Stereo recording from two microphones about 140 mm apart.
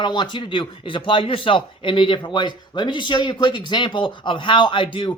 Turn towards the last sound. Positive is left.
turn(degrees=35)  # may be behind; listen again after turning